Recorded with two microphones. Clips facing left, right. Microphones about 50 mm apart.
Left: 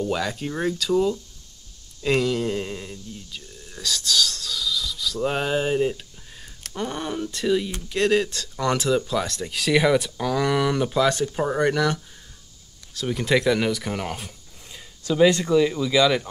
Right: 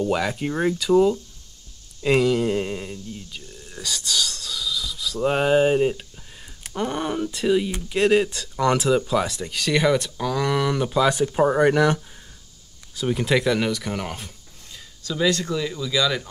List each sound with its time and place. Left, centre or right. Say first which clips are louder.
0.0 s speech: right 3 dB; centre
12.9 s speech: right 1 dB; centre
14.7 s speech: left 5 dB; left